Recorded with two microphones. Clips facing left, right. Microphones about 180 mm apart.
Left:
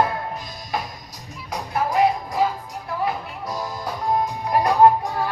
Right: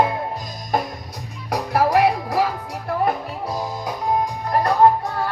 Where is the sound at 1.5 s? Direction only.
70° right (ahead or behind).